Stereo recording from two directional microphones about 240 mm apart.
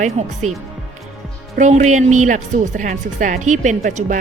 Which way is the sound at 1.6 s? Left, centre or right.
Right.